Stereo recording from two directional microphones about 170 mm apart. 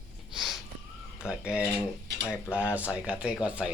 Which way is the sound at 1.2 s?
5° right (ahead or behind).